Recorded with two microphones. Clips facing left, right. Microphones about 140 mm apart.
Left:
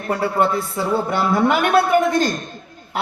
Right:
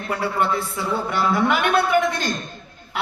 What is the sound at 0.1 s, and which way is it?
A man's voice, 40° left (ahead or behind).